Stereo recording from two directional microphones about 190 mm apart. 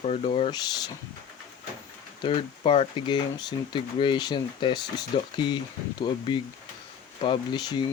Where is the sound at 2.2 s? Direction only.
30° left (ahead or behind).